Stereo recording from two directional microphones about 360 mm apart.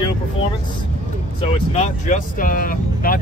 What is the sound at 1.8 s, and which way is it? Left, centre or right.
Speech, left.